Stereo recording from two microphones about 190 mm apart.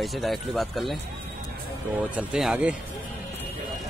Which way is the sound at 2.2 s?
5° right (ahead or behind).